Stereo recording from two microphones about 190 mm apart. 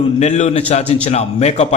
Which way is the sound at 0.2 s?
35° left (ahead or behind).